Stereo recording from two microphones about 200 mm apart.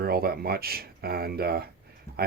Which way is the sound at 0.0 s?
50° right (ahead or behind).